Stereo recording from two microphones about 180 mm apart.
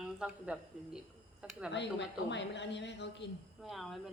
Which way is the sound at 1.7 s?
75° left (ahead or behind).